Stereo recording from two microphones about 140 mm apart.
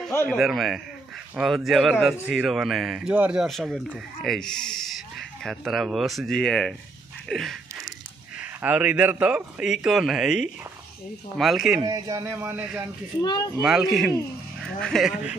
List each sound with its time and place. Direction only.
0.1 s speech: 15° left (ahead or behind)
0.4 s speech: centre (ahead or behind)
7.2 s a sound: centre (ahead or behind)
8.4 s a man's voice: 10° right (ahead or behind)
11.8 s a man's voice: 25° right (ahead or behind)
13.2 s speech: 30° left (ahead or behind)
13.6 s speech: 5° right (ahead or behind)